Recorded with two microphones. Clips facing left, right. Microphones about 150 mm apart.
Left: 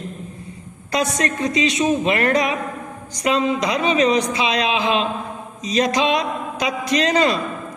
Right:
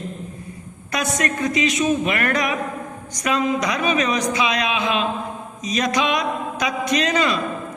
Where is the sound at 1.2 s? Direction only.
30° left (ahead or behind).